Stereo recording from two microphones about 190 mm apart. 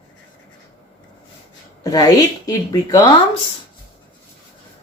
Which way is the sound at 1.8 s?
20° left (ahead or behind).